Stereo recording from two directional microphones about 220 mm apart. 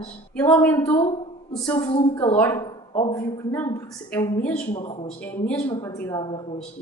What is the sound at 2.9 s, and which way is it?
Speech, 25° left (ahead or behind).